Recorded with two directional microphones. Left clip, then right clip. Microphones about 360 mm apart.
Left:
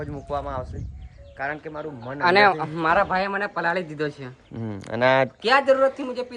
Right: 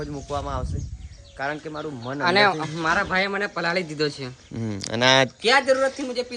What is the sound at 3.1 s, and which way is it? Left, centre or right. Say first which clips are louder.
Speech: even; centre.